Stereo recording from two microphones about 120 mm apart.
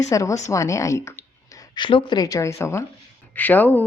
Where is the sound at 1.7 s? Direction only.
45° left (ahead or behind); by 2.8 s 25° left (ahead or behind).